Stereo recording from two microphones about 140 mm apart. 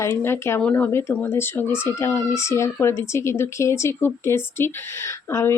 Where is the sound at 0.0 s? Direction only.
20° left (ahead or behind).